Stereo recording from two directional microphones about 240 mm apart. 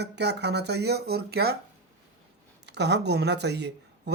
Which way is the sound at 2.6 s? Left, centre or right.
Right.